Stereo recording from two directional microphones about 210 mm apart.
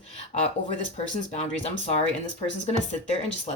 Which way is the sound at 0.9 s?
30° left (ahead or behind).